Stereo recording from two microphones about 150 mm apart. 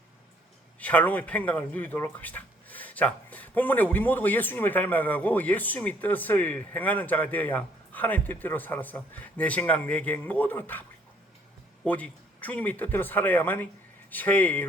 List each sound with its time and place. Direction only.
0.8 s speech: 10° left (ahead or behind)